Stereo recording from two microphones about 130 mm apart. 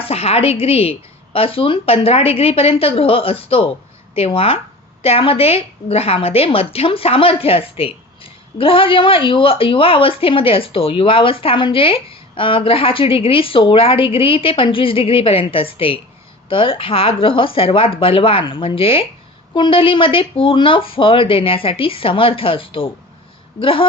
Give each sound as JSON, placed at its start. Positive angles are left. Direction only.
{"t": 0.0, "sound": "a woman's voice", "side_deg": 50}